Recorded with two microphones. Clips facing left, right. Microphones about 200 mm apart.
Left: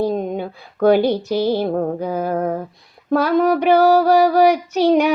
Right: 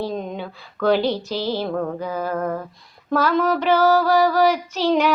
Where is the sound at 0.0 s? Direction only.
50° left (ahead or behind).